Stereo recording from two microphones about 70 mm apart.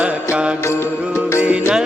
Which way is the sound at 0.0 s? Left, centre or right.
Centre.